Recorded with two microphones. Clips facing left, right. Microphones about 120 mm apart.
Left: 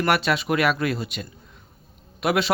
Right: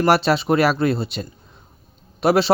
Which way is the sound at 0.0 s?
30° right (ahead or behind).